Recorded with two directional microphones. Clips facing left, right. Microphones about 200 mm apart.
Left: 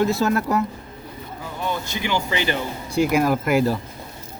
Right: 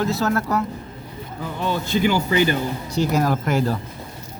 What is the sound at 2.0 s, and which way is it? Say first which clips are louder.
Speech: right 4 dB; 45° right (ahead or behind).